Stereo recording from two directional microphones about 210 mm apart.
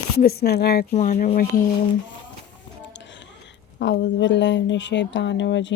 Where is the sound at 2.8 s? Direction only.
60° left (ahead or behind).